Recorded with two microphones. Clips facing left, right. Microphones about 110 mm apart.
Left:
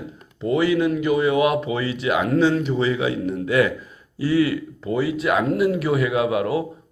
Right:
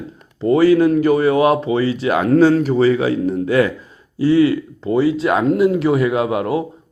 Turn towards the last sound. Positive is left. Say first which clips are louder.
# right 2 dB
turn(degrees=-30)  # may be behind; listen again after turning